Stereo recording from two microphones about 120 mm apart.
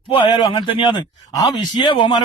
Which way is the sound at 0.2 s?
40° left (ahead or behind).